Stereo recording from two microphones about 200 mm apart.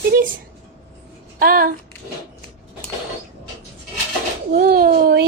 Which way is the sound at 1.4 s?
45° right (ahead or behind).